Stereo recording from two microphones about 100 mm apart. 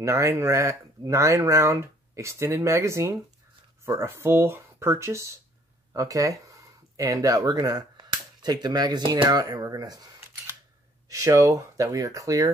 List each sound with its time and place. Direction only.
0.0 s speech: 30° right (ahead or behind)
11.1 s speech: 35° right (ahead or behind)